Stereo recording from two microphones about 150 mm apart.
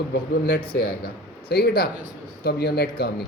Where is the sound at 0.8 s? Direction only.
90° left.